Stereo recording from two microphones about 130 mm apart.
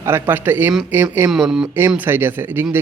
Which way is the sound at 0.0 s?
15° right (ahead or behind).